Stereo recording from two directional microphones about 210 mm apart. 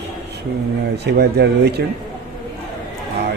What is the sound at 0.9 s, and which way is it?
Speech, 50° right (ahead or behind).